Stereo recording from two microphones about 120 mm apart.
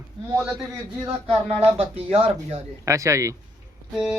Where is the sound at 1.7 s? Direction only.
50° right (ahead or behind).